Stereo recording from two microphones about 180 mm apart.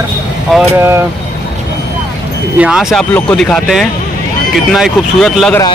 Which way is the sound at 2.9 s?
5° left (ahead or behind).